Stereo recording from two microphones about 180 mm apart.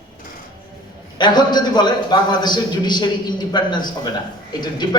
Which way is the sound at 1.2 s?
25° left (ahead or behind).